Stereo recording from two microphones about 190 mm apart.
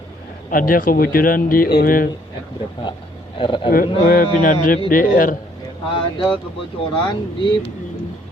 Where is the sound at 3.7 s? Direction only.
50° left (ahead or behind).